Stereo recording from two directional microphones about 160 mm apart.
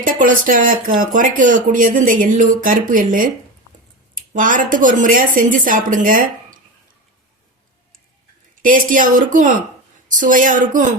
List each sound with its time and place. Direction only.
0.0 s a woman's voice: 60° right (ahead or behind)
8.6 s a woman's voice: 60° right (ahead or behind)